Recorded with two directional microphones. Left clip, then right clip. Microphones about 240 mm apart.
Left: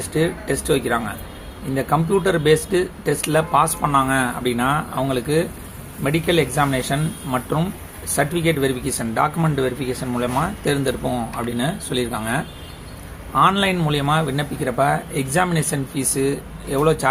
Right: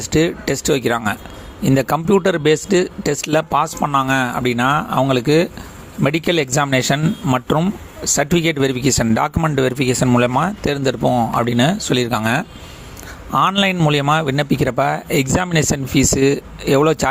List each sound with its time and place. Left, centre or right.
0.0 s speech: right